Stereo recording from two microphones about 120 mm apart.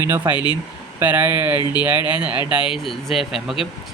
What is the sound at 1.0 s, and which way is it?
Speech, 15° right (ahead or behind).